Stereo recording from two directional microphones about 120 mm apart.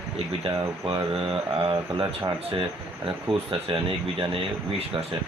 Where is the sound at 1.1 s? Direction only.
50° right (ahead or behind).